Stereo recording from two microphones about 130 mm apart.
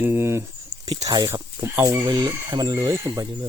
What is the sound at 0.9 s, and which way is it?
Speech, 30° right (ahead or behind).